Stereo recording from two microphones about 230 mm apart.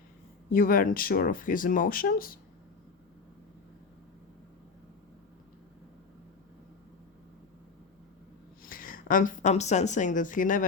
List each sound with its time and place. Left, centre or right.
0.5 s speech: left
8.6 s a woman's voice: left